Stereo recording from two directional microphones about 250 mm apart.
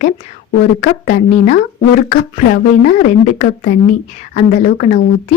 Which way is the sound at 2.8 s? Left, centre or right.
Left.